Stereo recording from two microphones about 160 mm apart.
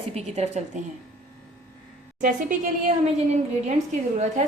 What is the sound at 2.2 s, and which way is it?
Speech, 55° right (ahead or behind).